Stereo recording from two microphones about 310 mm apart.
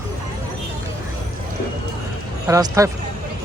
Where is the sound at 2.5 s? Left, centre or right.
Centre.